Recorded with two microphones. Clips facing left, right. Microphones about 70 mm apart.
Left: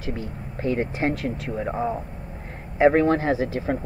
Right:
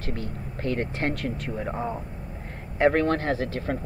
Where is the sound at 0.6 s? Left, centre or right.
Centre.